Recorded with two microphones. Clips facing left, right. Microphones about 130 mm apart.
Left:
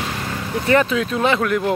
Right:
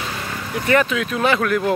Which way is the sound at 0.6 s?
30° left (ahead or behind).